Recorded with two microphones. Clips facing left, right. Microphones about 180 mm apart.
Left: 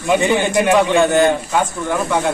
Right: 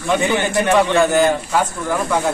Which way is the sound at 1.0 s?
Centre (ahead or behind).